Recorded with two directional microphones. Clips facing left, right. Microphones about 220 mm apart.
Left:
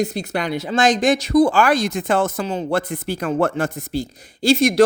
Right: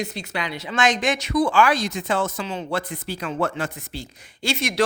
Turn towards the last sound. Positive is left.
turn(degrees=40)  # may be behind; listen again after turning